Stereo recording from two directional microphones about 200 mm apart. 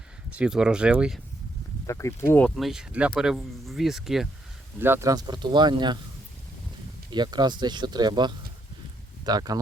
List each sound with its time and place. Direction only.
0.3 s speech: 5° right (ahead or behind)
1.9 s speech: 15° left (ahead or behind)
2.6 s speech: centre (ahead or behind)
4.8 s speech: 10° right (ahead or behind)
7.1 s speech: 20° right (ahead or behind)